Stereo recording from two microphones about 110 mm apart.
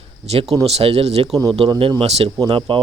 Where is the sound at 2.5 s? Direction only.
50° right (ahead or behind).